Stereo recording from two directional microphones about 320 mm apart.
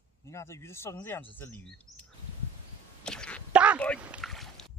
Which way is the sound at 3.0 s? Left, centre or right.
Centre.